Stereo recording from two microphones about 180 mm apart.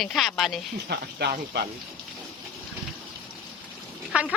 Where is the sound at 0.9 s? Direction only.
65° right (ahead or behind).